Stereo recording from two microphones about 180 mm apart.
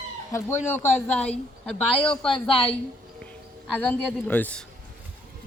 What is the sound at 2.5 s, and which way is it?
Speech, 30° left (ahead or behind).